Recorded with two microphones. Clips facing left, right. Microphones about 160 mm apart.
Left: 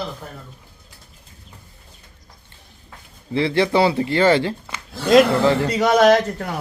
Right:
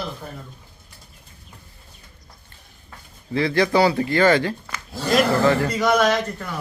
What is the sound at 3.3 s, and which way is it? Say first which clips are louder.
Speech: left 1 dB; 25° left (ahead or behind).